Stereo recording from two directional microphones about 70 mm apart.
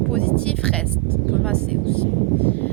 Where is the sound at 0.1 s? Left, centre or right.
Centre.